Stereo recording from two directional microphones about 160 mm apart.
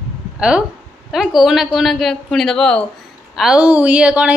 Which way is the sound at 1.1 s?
Centre (ahead or behind).